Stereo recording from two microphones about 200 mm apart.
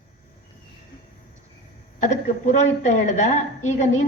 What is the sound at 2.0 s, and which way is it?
A woman's voice, 35° left (ahead or behind).